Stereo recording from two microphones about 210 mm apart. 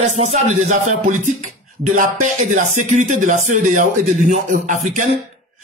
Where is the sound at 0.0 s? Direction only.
35° right (ahead or behind).